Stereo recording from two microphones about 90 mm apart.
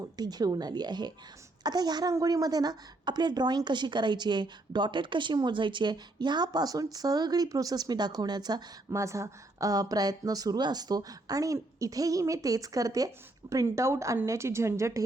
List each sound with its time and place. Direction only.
0.0 s a woman's voice: 50° right (ahead or behind)
8.9 s speech: 35° right (ahead or behind)